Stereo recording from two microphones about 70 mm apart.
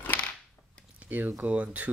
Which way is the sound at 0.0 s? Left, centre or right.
Left.